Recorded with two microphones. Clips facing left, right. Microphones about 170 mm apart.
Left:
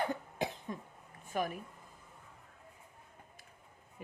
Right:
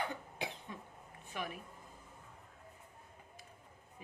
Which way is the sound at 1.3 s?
45° left (ahead or behind).